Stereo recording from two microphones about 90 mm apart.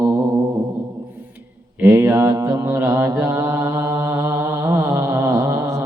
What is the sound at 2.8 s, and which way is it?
Mantra, 45° right (ahead or behind).